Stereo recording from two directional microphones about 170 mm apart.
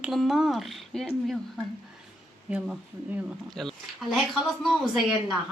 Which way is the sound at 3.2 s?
Centre (ahead or behind).